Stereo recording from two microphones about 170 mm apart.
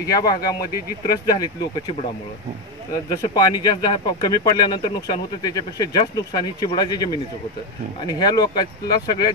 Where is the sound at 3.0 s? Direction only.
20° left (ahead or behind).